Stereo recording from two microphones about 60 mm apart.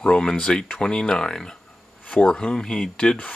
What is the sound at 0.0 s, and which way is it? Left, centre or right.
Speech, centre.